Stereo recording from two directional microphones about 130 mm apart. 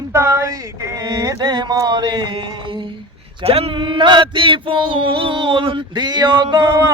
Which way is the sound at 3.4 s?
50° right (ahead or behind).